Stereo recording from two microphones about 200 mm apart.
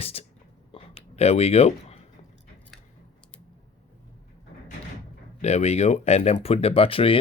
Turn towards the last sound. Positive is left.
turn(degrees=30)  # may be behind; listen again after turning